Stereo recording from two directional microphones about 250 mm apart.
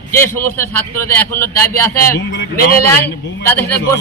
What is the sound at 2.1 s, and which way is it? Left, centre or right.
Speech, left.